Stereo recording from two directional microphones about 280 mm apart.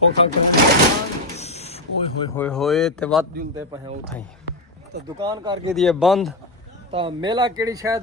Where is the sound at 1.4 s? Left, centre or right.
Left.